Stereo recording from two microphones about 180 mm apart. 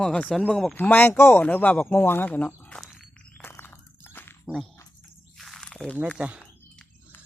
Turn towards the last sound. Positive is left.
turn(degrees=-5)  # may be behind; listen again after turning